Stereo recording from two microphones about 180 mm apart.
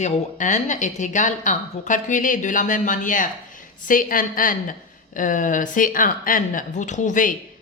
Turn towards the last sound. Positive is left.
turn(degrees=45)  # may be behind; listen again after turning